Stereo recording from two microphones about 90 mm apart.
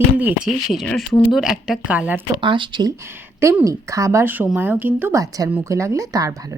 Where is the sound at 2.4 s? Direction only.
65° right (ahead or behind).